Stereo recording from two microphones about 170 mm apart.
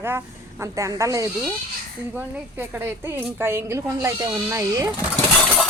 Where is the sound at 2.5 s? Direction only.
10° right (ahead or behind).